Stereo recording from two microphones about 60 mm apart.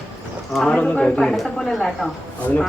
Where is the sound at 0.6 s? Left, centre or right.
Left.